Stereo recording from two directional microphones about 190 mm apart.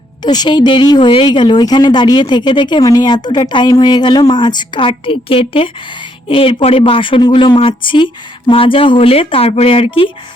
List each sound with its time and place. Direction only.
0.2 s a woman's voice: 20° left (ahead or behind)